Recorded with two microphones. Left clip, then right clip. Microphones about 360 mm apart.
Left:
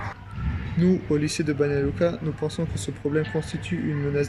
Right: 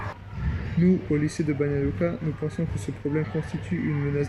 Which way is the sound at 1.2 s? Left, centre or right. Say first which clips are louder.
Left 2 dB; left.